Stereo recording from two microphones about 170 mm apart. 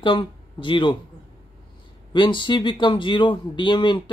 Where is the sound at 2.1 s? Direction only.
30° left (ahead or behind).